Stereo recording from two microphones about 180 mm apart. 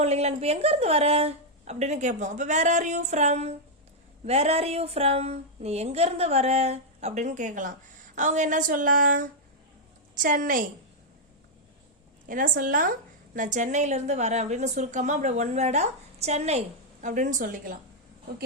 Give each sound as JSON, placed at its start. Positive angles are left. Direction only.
{"t": 0.0, "sound": "a woman's voice", "side_deg": -35}
{"t": 12.3, "sound": "a woman's voice", "side_deg": -50}